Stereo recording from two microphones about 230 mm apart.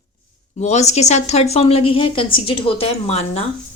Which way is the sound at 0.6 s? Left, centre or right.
Left.